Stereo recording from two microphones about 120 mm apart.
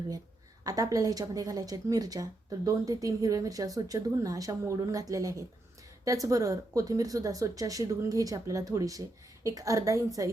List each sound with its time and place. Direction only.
0.6 s a woman's voice: 30° right (ahead or behind)